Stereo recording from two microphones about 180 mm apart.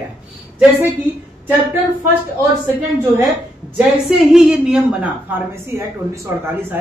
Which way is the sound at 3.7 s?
5° right (ahead or behind).